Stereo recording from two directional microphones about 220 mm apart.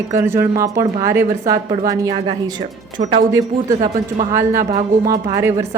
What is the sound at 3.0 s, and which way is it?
Speech, 30° right (ahead or behind).